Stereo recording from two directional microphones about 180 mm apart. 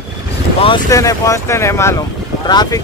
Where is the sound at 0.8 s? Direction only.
20° left (ahead or behind).